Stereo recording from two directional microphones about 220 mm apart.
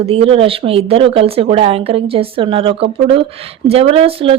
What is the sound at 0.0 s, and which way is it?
Speech, 25° right (ahead or behind).